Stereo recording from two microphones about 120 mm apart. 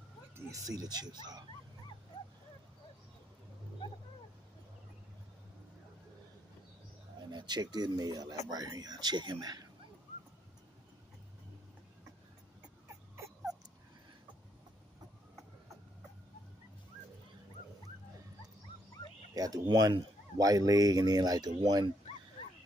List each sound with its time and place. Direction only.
0.7 s speech: 35° right (ahead or behind)
7.2 s speech: 40° right (ahead or behind)
19.3 s speech: 30° right (ahead or behind)